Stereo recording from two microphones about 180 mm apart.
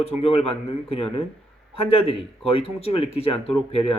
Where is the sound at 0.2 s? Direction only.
30° left (ahead or behind).